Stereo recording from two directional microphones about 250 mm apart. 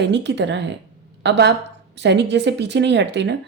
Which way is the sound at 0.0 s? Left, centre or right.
Right.